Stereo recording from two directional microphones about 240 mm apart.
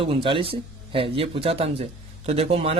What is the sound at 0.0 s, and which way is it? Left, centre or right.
A man's voice, right.